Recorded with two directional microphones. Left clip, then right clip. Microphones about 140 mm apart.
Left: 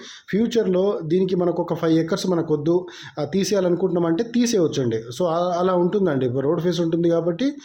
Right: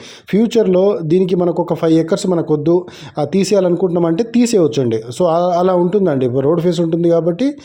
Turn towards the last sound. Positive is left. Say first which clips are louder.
# right 7 dB
turn(degrees=-35)  # may be behind; listen again after turning